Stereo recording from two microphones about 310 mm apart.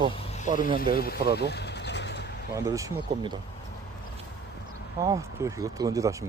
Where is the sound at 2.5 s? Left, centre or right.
Centre.